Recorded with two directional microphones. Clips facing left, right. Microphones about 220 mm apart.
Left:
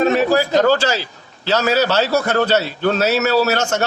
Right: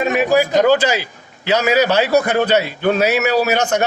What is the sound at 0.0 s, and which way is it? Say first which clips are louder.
A man's voice: even; 15° right (ahead or behind).